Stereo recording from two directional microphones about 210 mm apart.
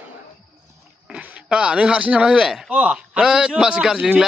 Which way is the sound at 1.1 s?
5° right (ahead or behind).